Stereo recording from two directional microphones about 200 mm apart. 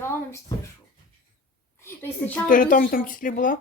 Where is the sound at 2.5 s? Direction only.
40° left (ahead or behind).